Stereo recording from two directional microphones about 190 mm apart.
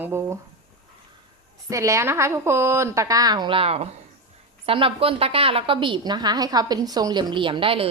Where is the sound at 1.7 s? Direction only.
15° right (ahead or behind).